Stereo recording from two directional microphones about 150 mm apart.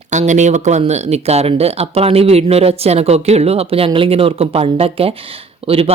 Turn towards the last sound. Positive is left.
turn(degrees=-40)  # may be behind; listen again after turning